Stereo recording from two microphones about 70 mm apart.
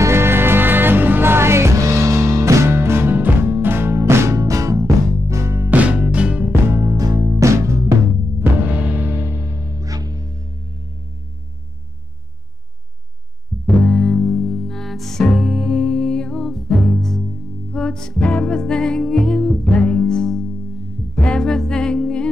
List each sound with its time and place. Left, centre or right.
0.0 s music: right
4.4 s music: right
5.7 s music: centre
6.8 s music: right
8.6 s music: right
9.4 s music: right
13.5 s music: centre